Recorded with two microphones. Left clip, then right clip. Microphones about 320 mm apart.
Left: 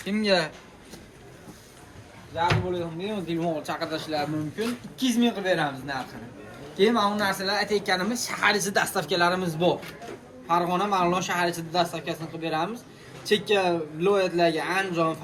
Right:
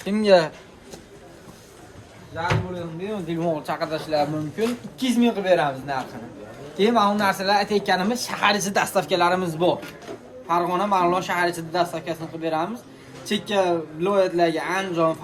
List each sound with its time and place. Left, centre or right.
0.0 s speech: right
3.1 s speech: centre